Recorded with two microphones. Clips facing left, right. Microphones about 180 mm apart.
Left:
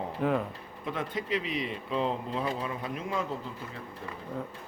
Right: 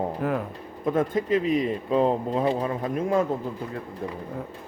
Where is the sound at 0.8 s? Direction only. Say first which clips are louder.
Right 10 dB; 45° right (ahead or behind).